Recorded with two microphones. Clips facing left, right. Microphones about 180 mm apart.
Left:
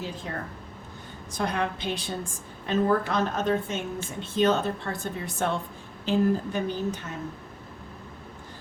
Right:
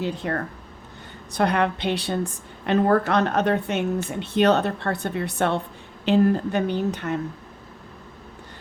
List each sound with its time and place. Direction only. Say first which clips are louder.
0.0 s speech: right 8 dB; 65° right (ahead or behind)